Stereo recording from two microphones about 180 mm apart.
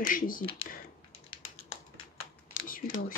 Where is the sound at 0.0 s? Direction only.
50° left (ahead or behind).